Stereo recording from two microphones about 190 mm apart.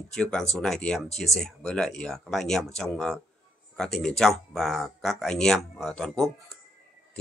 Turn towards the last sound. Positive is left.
turn(degrees=0)  # may be behind; listen again after turning